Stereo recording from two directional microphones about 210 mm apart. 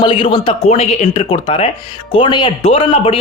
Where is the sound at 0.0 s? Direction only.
25° left (ahead or behind).